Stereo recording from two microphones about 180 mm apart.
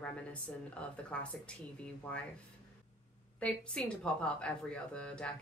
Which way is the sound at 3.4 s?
5° left (ahead or behind).